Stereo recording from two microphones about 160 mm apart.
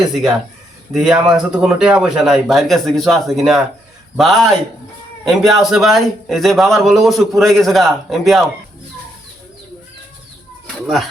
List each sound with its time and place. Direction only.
0.0 s a man's voice: centre (ahead or behind)